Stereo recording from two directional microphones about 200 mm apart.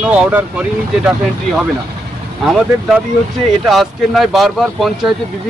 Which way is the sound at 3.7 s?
Centre (ahead or behind).